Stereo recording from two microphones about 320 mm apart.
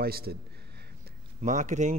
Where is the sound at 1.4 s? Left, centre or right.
Right.